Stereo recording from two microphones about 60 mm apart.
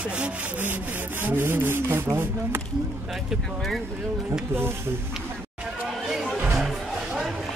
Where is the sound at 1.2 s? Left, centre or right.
Right.